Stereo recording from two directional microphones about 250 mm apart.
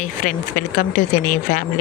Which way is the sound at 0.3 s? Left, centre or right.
Left.